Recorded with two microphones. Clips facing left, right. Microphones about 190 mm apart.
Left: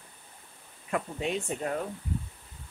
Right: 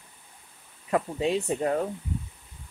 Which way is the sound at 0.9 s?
25° right (ahead or behind).